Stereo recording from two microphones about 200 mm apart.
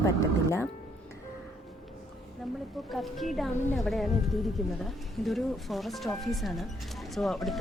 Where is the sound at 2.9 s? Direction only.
Centre (ahead or behind).